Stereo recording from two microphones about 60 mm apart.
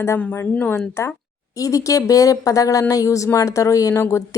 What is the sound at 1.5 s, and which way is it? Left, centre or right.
A woman's voice, left.